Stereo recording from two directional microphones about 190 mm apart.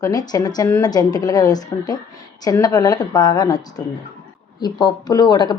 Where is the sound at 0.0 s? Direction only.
20° left (ahead or behind).